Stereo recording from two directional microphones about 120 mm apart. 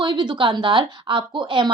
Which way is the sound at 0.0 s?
40° right (ahead or behind).